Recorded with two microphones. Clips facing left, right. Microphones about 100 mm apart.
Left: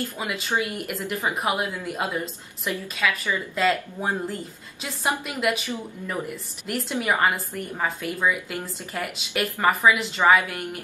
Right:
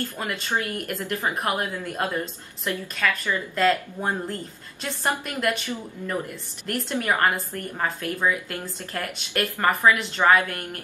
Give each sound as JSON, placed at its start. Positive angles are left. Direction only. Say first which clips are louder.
{"t": 0.2, "sound": "a woman's voice", "louder": "left 1 dB", "side_deg": 5}
{"t": 5.7, "sound": "a woman's voice", "louder": "even", "side_deg": 15}
{"t": 6.2, "sound": "a woman's voice", "louder": "left 1 dB", "side_deg": 5}